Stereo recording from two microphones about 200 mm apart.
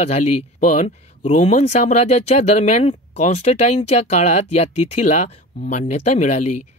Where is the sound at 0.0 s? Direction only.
35° left (ahead or behind).